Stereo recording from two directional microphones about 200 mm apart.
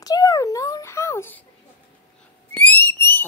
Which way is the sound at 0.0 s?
20° left (ahead or behind).